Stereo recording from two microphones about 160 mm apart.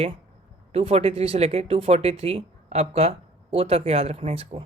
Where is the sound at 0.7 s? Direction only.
40° right (ahead or behind).